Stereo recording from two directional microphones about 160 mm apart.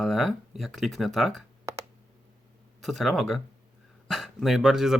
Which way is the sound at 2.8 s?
Centre (ahead or behind).